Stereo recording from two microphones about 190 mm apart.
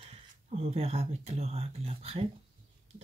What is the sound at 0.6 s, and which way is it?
Speech, 30° right (ahead or behind).